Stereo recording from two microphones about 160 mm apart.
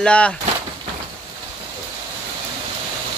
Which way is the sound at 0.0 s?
5° left (ahead or behind).